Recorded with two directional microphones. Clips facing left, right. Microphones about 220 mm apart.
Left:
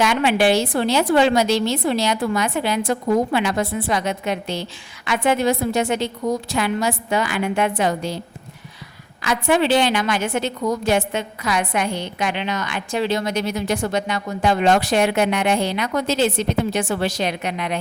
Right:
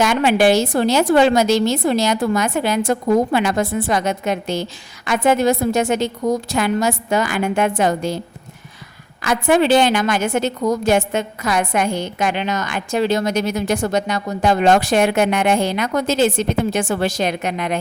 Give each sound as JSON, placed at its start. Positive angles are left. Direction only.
{"t": 0.0, "sound": "a woman's voice", "side_deg": -45}
{"t": 9.2, "sound": "a woman's voice", "side_deg": -45}